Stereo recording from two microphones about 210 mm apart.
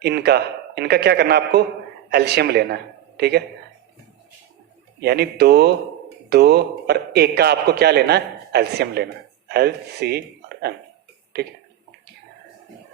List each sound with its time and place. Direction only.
0.0 s a man's voice: 50° right (ahead or behind)
4.9 s a man's voice: 50° right (ahead or behind)